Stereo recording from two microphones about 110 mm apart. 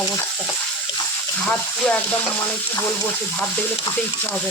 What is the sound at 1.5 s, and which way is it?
Frying, 10° left (ahead or behind).